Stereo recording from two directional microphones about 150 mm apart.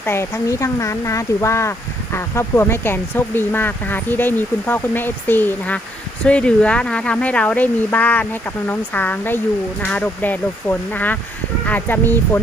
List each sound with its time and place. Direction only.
0.0 s speech: 15° left (ahead or behind)